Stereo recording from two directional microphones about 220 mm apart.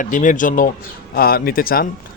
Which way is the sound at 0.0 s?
35° left (ahead or behind).